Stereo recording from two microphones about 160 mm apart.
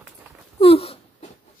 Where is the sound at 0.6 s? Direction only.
40° left (ahead or behind).